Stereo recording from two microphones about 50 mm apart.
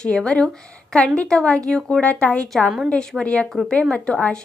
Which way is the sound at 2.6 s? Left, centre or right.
Centre.